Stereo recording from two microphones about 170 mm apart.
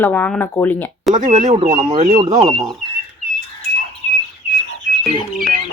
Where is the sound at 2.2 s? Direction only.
35° right (ahead or behind).